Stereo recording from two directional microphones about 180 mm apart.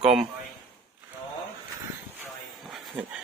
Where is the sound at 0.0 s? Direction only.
Centre (ahead or behind).